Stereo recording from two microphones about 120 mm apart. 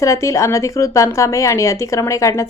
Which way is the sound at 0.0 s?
25° left (ahead or behind).